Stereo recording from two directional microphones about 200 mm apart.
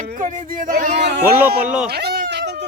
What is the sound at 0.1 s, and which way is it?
Speech, 40° right (ahead or behind).